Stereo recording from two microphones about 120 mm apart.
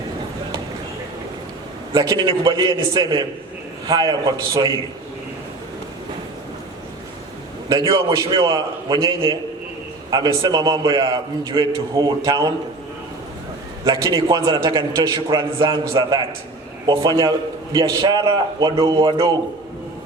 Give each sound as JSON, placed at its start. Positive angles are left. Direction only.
{"t": 1.9, "sound": "a man's voice", "side_deg": -30}
{"t": 7.7, "sound": "a man's voice", "side_deg": -30}
{"t": 13.8, "sound": "a man's voice", "side_deg": -30}